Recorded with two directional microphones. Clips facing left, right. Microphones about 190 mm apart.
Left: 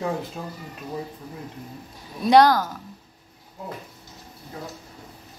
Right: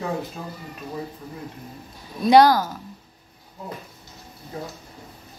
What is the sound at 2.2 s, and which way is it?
Speech, 5° right (ahead or behind).